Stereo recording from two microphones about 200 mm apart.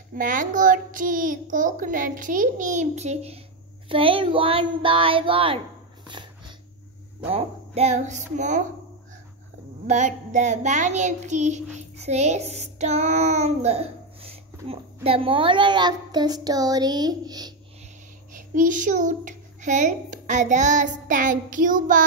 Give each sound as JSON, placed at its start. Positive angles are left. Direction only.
{"t": 0.1, "sound": "a child's voice", "side_deg": -40}
{"t": 6.0, "sound": "dog", "side_deg": -25}
{"t": 7.2, "sound": "a child's voice", "side_deg": -30}
{"t": 9.8, "sound": "a child's voice", "side_deg": -35}
{"t": 18.3, "sound": "a child's voice", "side_deg": -40}